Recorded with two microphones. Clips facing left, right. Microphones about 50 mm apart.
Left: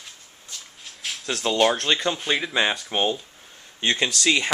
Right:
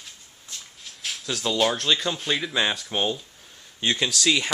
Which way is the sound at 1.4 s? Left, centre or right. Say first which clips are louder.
Left 2 dB; left.